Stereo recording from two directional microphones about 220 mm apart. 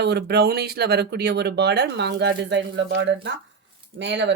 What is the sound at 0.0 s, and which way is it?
Speech, 50° right (ahead or behind).